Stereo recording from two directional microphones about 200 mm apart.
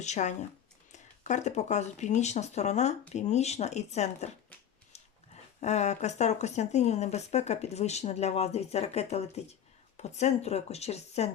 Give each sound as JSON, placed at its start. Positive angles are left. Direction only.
{"t": 0.0, "sound": "speech", "side_deg": 35}
{"t": 5.5, "sound": "speech", "side_deg": 35}